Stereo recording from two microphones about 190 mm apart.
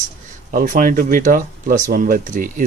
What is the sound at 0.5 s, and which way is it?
Speech, 45° right (ahead or behind).